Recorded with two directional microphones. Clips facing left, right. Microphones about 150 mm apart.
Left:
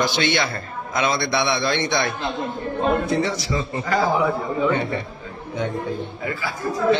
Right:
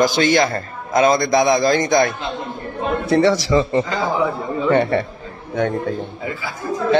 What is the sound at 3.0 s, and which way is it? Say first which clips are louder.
Speech: right 7 dB; 75° right (ahead or behind).